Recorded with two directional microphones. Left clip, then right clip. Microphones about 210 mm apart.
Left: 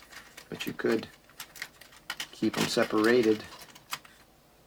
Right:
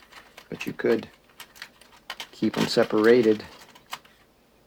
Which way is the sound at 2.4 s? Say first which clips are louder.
Right 5 dB; 30° right (ahead or behind).